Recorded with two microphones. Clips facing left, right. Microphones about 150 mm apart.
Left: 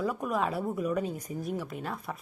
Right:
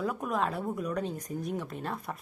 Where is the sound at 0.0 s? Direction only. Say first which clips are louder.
Left 1 dB; centre (ahead or behind).